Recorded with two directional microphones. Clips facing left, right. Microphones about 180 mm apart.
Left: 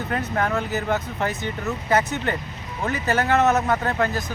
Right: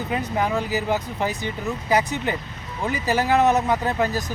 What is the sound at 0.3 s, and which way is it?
Speech, 5° right (ahead or behind).